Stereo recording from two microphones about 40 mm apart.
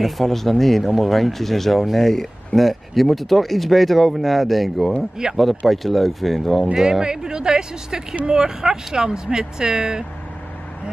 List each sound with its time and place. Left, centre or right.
0.0 s speech: centre
6.7 s speech: centre